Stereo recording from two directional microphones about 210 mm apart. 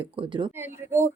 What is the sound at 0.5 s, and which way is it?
Speech, 10° right (ahead or behind).